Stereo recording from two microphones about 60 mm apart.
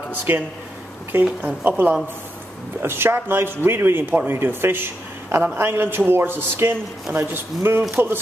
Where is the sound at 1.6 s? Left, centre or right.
Right.